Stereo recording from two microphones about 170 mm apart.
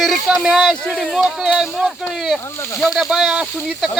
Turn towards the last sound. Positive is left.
turn(degrees=-5)  # may be behind; listen again after turning